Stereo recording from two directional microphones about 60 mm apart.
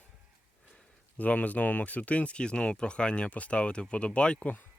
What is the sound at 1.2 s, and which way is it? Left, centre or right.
Speech, left.